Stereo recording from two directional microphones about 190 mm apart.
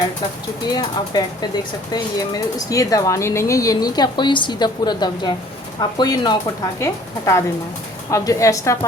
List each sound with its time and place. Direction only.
0.7 s a woman's voice: 20° left (ahead or behind)